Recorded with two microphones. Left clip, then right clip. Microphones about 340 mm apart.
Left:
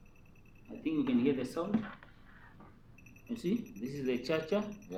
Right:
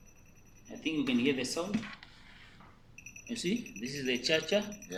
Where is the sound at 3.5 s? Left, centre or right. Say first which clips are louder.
Right 1 dB; right.